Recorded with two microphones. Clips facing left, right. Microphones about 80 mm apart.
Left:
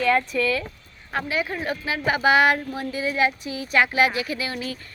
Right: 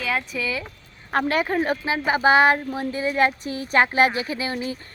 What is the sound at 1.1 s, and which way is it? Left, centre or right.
Speech, right.